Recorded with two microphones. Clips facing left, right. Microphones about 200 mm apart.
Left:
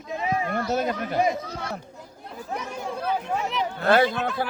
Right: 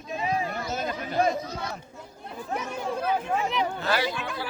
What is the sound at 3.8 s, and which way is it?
Speech, 55° left (ahead or behind).